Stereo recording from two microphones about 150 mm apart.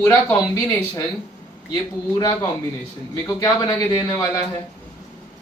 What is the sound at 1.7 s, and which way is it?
Speech, 25° left (ahead or behind).